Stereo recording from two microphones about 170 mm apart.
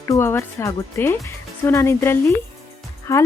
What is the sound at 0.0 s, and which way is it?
Speech, 15° left (ahead or behind).